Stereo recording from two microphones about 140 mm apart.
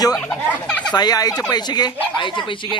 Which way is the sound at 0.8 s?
30° left (ahead or behind).